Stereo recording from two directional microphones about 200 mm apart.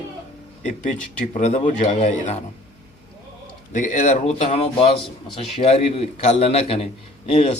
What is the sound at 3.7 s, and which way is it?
A man's voice, 40° left (ahead or behind).